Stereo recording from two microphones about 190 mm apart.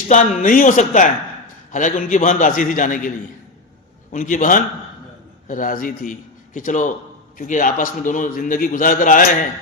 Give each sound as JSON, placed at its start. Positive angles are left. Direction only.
{"t": 0.1, "sound": "a man's voice", "side_deg": 45}
{"t": 4.1, "sound": "a man's voice", "side_deg": 45}